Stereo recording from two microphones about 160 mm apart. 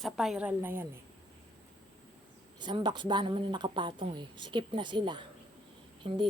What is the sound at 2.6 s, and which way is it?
A woman's voice, 30° right (ahead or behind).